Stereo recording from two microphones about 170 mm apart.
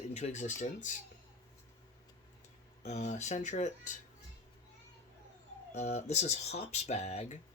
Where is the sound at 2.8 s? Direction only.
45° left (ahead or behind).